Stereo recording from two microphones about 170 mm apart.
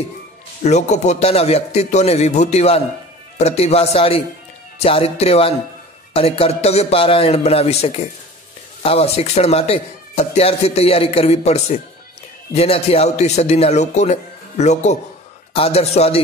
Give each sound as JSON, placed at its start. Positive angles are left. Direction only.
{"t": 0.7, "sound": "speech", "side_deg": 40}